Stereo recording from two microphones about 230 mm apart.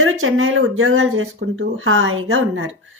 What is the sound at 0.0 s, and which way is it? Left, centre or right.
Speech, right.